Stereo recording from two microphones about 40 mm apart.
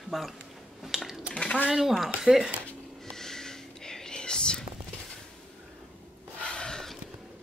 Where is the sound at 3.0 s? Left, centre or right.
Centre.